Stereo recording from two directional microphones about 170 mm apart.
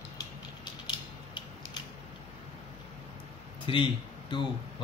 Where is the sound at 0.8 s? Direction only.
25° left (ahead or behind).